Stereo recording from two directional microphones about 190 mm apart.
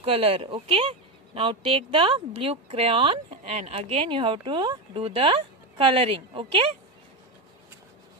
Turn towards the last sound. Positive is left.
turn(degrees=-30)  # may be behind; listen again after turning